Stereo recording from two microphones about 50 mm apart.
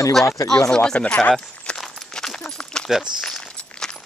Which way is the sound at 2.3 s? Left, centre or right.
Centre.